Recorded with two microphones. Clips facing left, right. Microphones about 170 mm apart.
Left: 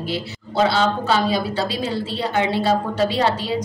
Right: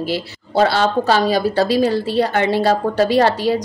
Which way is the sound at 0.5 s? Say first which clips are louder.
Right 3 dB; 40° right (ahead or behind).